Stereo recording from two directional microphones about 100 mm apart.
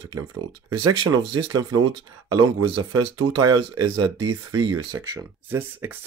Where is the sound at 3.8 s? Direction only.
45° right (ahead or behind).